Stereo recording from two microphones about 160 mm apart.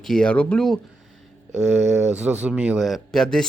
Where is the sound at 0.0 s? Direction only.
5° left (ahead or behind).